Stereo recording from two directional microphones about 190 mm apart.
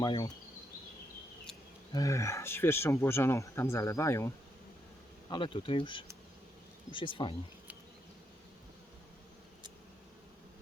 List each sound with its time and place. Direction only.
0.0 s speech: 25° left (ahead or behind)
1.9 s speech: 15° left (ahead or behind)
5.3 s speech: 25° left (ahead or behind)